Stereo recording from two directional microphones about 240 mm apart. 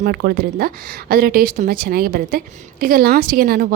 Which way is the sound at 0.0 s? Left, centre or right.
Right.